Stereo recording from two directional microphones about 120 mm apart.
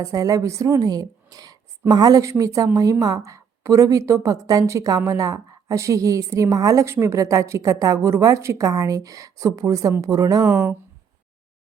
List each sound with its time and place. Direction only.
0.0 s a woman's voice: 30° right (ahead or behind)